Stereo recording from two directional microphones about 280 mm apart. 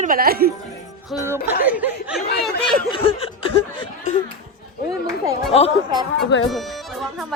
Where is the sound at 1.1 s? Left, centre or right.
Centre.